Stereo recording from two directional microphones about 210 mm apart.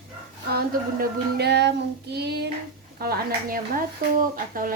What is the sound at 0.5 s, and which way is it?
Speech, 50° right (ahead or behind).